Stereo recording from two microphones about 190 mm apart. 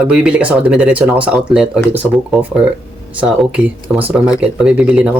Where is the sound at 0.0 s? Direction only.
5° right (ahead or behind).